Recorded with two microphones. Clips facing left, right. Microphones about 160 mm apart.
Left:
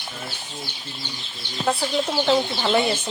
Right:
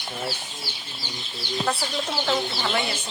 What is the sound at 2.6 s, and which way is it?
Speech, 25° left (ahead or behind).